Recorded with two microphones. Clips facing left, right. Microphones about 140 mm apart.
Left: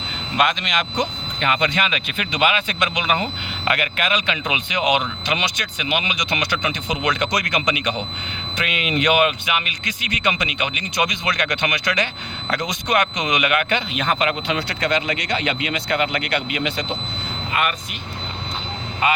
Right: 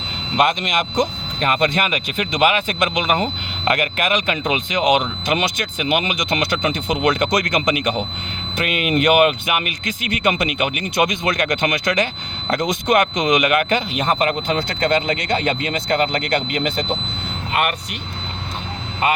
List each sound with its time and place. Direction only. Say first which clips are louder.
0.4 s speech: right 3 dB; 45° right (ahead or behind)